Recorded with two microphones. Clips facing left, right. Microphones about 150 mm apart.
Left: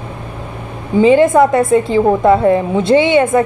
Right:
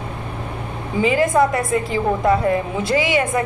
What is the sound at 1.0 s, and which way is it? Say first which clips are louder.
A woman's voice: left 7 dB; 25° left (ahead or behind).